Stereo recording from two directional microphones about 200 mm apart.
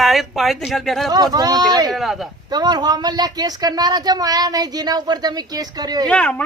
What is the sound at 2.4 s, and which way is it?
Speech, 20° right (ahead or behind).